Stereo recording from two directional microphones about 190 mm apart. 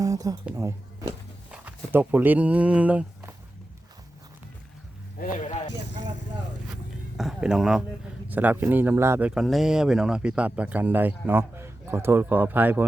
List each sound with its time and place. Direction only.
0.0 s a sound: 20° right (ahead or behind)
0.4 s speech: 15° right (ahead or behind)
5.5 s speech: 35° left (ahead or behind)
7.2 s speech: 5° right (ahead or behind)